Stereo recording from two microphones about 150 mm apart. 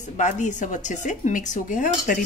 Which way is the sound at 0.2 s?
55° left (ahead or behind).